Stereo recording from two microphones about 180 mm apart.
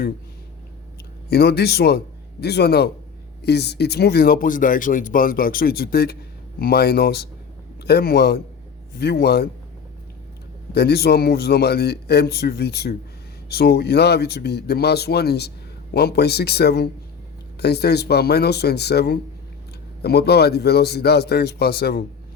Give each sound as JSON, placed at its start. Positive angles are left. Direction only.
{"t": 1.3, "sound": "speech", "side_deg": 65}
{"t": 10.7, "sound": "speech", "side_deg": 65}